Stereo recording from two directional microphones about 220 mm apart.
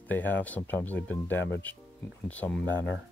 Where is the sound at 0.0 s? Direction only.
10° left (ahead or behind).